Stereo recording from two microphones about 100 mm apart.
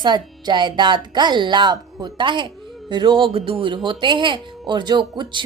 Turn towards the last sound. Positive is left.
turn(degrees=-50)  # may be behind; listen again after turning